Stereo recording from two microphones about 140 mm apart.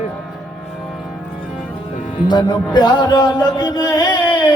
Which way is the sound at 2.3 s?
30° left (ahead or behind).